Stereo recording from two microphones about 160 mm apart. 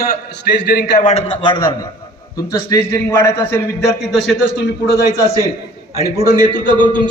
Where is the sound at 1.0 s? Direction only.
45° left (ahead or behind).